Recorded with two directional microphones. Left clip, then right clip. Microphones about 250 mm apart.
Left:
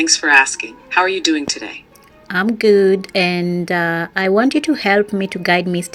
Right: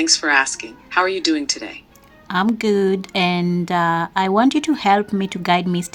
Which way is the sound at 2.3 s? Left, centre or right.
Centre.